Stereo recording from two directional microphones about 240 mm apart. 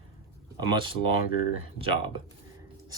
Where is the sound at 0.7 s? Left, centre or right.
Centre.